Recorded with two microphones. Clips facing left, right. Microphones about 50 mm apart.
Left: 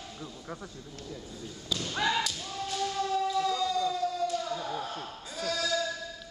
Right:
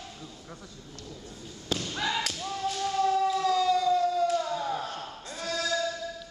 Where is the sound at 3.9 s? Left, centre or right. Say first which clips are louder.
Right 6 dB; right.